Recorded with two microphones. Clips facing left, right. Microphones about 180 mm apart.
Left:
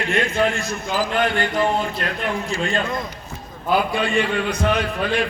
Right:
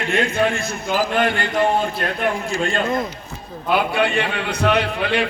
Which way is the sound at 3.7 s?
65° right (ahead or behind).